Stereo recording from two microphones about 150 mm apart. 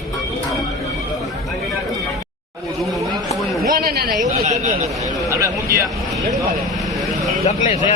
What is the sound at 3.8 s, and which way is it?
Speech, 90° right.